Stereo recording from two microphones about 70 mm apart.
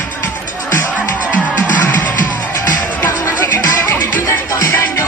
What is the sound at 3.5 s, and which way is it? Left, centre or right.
Music, left.